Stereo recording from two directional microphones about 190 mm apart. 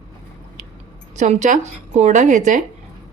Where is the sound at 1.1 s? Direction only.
40° right (ahead or behind).